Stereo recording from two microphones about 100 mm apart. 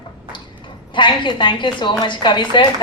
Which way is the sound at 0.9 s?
55° left (ahead or behind).